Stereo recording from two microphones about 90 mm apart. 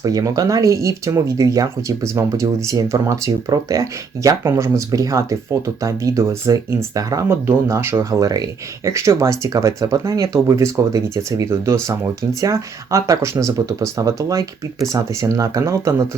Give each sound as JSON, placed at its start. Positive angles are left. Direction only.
{"t": 0.0, "sound": "speech", "side_deg": -40}
{"t": 8.2, "sound": "speech", "side_deg": -45}